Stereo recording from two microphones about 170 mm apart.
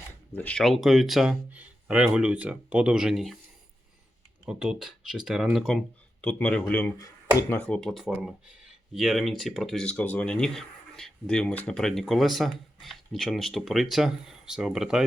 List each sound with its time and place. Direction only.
0.3 s speech: 5° left (ahead or behind)
4.4 s speech: 5° right (ahead or behind); by 7.7 s 15° left (ahead or behind)
7.7 s speech: 5° left (ahead or behind)